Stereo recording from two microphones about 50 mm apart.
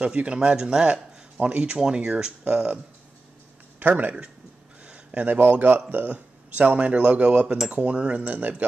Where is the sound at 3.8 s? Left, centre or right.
Right.